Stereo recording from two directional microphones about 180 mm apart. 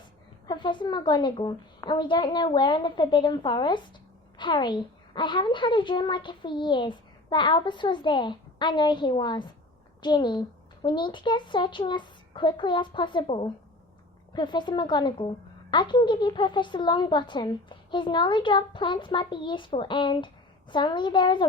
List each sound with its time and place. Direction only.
0.4 s a woman's voice: 25° left (ahead or behind)